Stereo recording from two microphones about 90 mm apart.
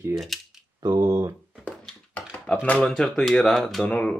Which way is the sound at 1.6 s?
15° left (ahead or behind).